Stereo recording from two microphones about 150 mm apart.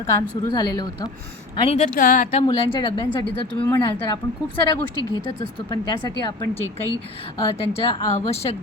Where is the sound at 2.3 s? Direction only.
30° left (ahead or behind).